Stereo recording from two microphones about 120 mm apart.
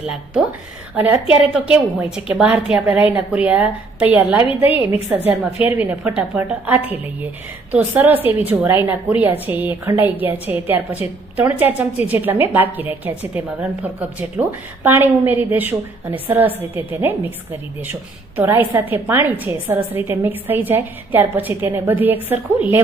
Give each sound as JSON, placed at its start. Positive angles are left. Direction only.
{"t": 0.9, "sound": "a woman's voice", "side_deg": -15}